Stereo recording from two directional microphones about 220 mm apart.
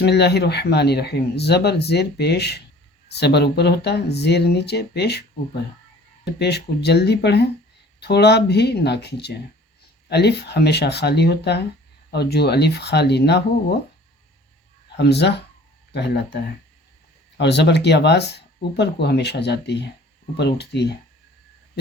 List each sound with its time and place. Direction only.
0.0 s speech: 50° left (ahead or behind)
6.2 s speech: 50° left (ahead or behind)
14.9 s speech: 50° left (ahead or behind)